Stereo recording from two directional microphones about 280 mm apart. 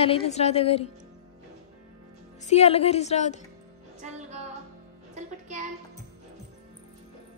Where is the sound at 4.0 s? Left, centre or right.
Right.